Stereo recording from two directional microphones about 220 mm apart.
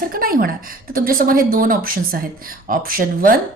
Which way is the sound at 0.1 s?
40° right (ahead or behind).